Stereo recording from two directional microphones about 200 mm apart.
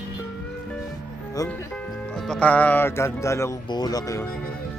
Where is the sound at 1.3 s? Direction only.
15° left (ahead or behind).